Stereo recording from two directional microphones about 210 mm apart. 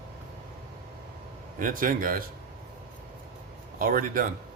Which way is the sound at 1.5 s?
40° right (ahead or behind).